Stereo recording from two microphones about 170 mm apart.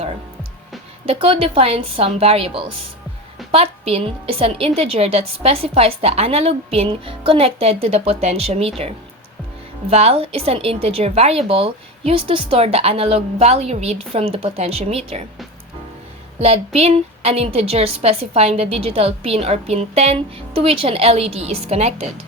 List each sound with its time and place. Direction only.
1.0 s a woman's voice: 35° right (ahead or behind)
9.9 s a woman's voice: 35° right (ahead or behind)
16.4 s a woman's voice: 40° right (ahead or behind)